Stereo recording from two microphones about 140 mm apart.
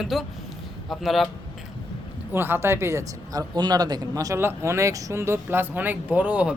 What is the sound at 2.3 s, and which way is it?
Speech, 15° right (ahead or behind).